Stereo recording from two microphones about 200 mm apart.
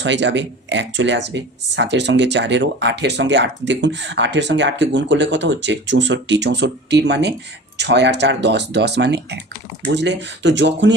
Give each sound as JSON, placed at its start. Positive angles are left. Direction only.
{"t": 0.0, "sound": "speech", "side_deg": -65}